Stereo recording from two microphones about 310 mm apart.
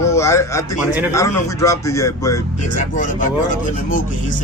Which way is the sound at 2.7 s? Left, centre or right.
Left.